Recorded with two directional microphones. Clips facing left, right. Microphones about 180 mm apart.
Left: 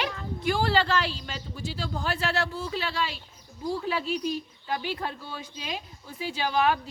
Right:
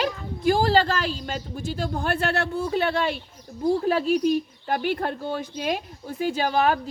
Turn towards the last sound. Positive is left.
turn(degrees=-40)  # may be behind; listen again after turning